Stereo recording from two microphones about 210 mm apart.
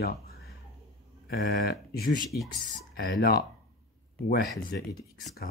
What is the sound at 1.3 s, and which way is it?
Speech, 45° left (ahead or behind).